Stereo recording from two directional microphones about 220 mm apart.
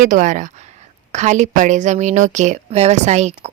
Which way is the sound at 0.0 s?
35° right (ahead or behind).